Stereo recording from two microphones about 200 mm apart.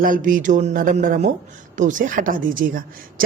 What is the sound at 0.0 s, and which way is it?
A woman's voice, 45° right (ahead or behind).